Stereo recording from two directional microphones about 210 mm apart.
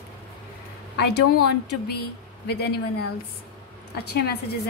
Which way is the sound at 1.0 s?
50° left (ahead or behind).